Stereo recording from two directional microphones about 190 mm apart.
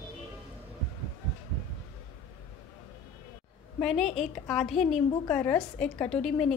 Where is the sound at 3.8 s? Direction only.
Centre (ahead or behind).